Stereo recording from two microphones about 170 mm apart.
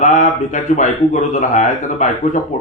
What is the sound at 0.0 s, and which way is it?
Speech, 45° left (ahead or behind).